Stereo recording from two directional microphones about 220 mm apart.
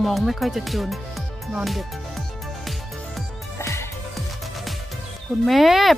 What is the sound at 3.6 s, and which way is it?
Music, 10° left (ahead or behind).